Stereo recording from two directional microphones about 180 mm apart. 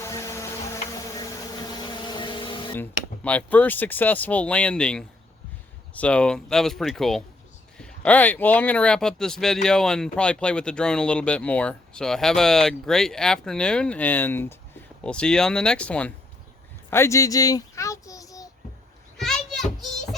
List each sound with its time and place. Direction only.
0.0 s a sound: 15° left (ahead or behind)
3.2 s a child's voice: 10° left (ahead or behind)
19.1 s children playing: centre (ahead or behind)